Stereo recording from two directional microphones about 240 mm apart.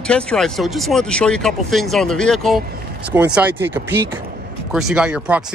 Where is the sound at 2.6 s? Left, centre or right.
Right.